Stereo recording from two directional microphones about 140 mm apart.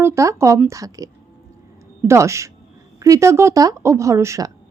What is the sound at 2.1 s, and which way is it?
A woman's voice, 20° right (ahead or behind).